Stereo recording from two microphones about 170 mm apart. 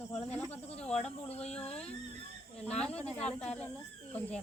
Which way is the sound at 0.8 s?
5° left (ahead or behind).